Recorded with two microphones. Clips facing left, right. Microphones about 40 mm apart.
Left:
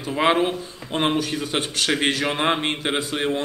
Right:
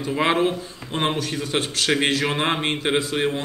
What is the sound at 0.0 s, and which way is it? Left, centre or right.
A man's voice, centre.